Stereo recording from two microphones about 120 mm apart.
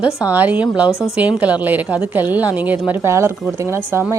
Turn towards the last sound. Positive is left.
turn(degrees=-20)  # may be behind; listen again after turning